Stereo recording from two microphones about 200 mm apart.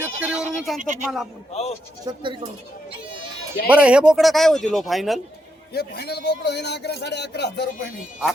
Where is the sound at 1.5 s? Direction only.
30° left (ahead or behind).